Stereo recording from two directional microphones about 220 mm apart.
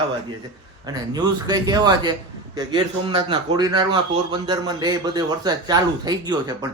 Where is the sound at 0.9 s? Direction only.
20° right (ahead or behind).